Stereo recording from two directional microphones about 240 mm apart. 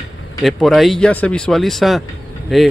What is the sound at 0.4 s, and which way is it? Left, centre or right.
Speech, centre.